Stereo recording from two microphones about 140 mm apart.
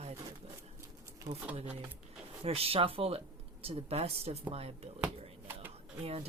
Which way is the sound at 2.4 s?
45° right (ahead or behind).